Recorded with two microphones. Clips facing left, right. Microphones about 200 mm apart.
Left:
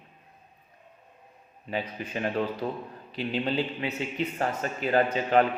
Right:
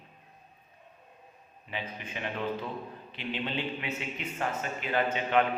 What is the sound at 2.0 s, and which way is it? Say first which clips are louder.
Speech: left 7 dB; 40° left (ahead or behind).